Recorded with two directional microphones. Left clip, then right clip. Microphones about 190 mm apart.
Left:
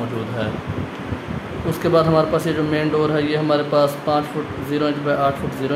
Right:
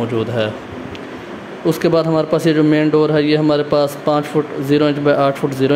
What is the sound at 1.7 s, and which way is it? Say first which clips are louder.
Speech: right 2 dB; 40° right (ahead or behind).